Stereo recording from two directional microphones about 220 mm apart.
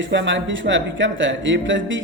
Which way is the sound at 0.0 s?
55° right (ahead or behind).